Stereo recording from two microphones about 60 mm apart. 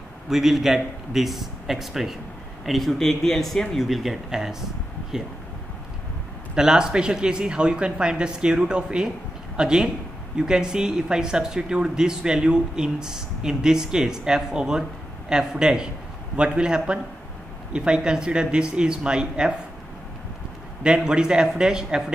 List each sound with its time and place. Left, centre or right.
0.3 s a man's voice: centre
6.5 s speech: centre
20.8 s speech: centre